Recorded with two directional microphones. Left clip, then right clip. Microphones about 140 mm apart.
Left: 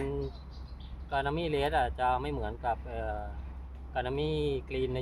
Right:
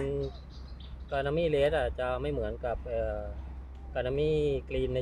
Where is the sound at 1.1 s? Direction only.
15° left (ahead or behind).